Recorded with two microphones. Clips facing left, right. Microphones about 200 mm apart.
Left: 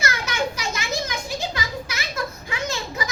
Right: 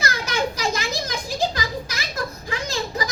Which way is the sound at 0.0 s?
35° right (ahead or behind).